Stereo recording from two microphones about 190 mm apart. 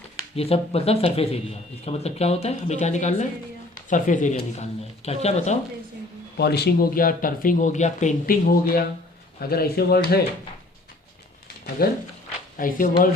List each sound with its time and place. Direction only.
0.3 s speech: 30° left (ahead or behind)
6.3 s speech: 60° left (ahead or behind)
11.8 s speech: 55° left (ahead or behind)